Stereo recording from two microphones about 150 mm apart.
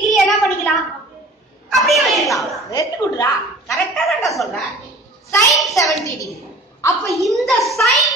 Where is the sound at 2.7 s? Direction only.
25° left (ahead or behind).